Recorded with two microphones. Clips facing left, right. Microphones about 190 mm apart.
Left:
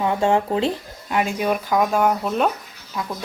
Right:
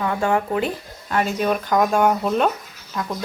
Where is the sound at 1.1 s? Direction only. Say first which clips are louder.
Even; 10° left (ahead or behind).